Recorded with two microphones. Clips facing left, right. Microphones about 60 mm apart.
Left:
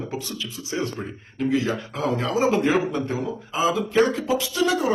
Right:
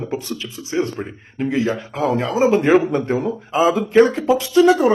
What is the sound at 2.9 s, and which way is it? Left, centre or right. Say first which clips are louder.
Speech: right 6 dB; right.